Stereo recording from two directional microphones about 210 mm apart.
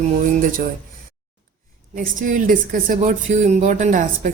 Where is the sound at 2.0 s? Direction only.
40° right (ahead or behind).